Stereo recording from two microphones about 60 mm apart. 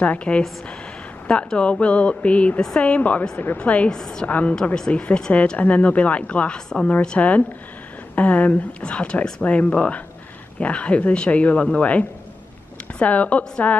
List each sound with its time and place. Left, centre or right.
0.0 s speech: left
3.9 s a woman's voice: centre
4.3 s speech: left
4.7 s a woman's voice: centre; by 8.9 s left
8.9 s speech: centre